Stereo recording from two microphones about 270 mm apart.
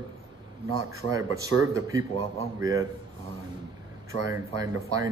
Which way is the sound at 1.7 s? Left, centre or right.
Centre.